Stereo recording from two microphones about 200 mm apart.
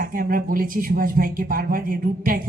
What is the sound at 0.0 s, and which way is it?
Speech, 45° right (ahead or behind).